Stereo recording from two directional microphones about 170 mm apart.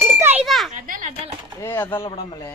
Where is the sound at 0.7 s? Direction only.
50° right (ahead or behind).